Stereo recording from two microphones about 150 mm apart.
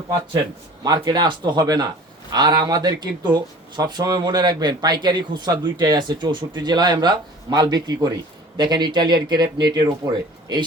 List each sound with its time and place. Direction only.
0.9 s speech: 25° right (ahead or behind)